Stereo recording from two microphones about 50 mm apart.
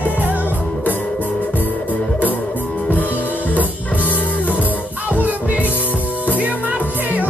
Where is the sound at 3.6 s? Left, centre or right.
Left.